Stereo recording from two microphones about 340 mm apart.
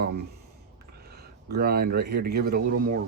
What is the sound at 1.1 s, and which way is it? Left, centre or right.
Speech, right.